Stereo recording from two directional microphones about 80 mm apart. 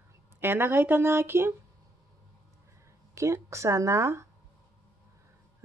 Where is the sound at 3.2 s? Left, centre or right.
Right.